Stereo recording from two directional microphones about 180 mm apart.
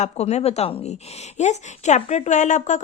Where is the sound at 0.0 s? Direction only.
40° left (ahead or behind).